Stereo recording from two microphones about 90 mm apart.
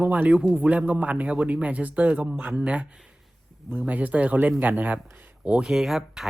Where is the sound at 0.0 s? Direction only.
20° right (ahead or behind).